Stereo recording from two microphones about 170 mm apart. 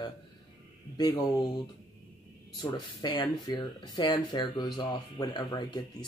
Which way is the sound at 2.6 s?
25° left (ahead or behind).